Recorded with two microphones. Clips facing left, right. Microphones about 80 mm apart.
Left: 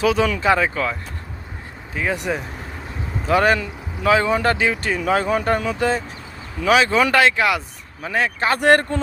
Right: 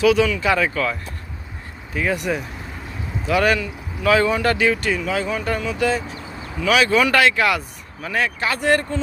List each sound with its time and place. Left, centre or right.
0.0 s speech: left
2.0 s speech: left
4.1 s speech: left
4.9 s speech: left
6.8 s speech: left
8.6 s speech: left